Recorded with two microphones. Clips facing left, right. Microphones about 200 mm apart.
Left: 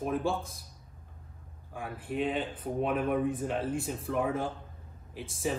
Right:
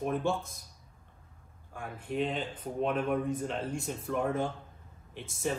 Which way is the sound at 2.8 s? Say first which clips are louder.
Left 1 dB; 5° left (ahead or behind).